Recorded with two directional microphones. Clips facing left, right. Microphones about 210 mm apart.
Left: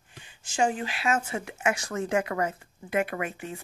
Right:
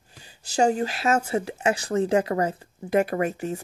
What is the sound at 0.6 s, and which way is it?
Speech, 40° right (ahead or behind).